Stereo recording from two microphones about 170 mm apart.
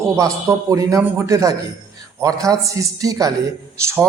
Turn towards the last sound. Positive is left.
turn(degrees=-15)  # may be behind; listen again after turning